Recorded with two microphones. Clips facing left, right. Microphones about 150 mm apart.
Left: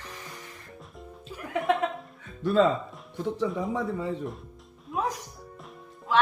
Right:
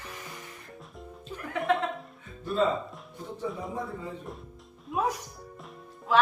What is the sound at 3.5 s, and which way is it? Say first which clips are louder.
Speech: left 6 dB; 85° left.